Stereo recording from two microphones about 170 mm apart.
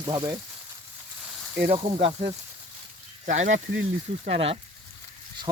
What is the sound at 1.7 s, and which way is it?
Speech, 35° right (ahead or behind).